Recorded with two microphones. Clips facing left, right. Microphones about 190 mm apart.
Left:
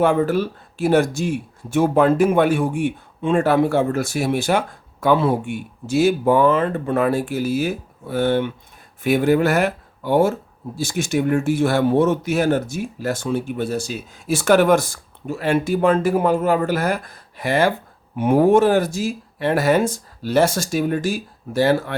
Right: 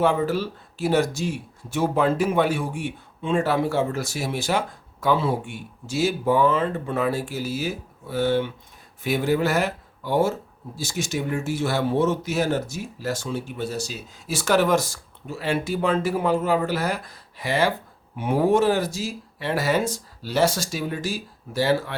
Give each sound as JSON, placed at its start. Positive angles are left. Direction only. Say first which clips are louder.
{"t": 0.0, "sound": "speech", "louder": "left 4 dB", "side_deg": 55}